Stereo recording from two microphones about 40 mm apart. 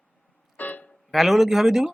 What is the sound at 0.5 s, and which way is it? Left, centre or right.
Music, left.